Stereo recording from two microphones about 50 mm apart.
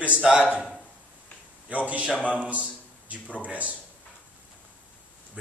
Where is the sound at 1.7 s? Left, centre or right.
Right.